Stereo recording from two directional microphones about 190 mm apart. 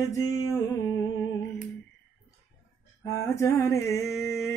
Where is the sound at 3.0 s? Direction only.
15° left (ahead or behind).